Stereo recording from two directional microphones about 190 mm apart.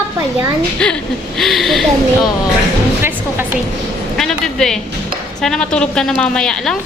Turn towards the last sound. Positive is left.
turn(degrees=5)  # may be behind; listen again after turning